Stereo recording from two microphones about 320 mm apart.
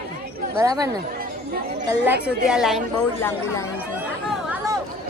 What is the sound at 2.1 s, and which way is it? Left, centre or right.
A woman's voice, centre.